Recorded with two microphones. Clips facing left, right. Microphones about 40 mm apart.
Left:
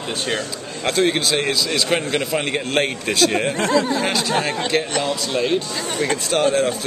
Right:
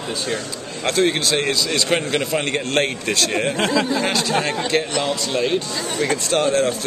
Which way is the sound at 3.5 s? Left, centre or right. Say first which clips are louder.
Even; right.